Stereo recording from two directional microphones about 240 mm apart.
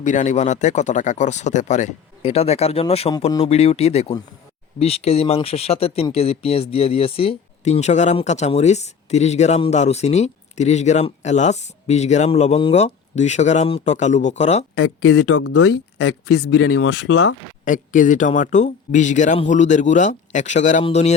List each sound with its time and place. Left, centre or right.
0.0 s speech: left
14.8 s speech: left
15.4 s speech: left
17.7 s speech: left